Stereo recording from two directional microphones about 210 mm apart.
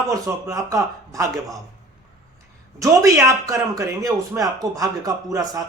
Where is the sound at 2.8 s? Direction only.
15° right (ahead or behind).